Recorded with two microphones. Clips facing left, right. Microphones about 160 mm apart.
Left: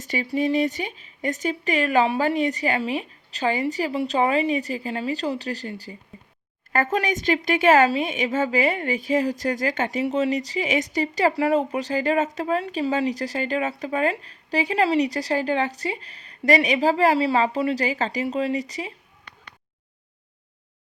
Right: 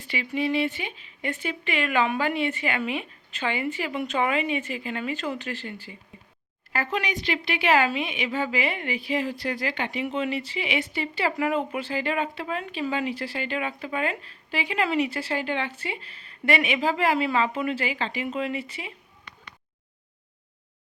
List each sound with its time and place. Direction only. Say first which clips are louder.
0.0 s a woman's voice: left 4 dB; 40° left (ahead or behind)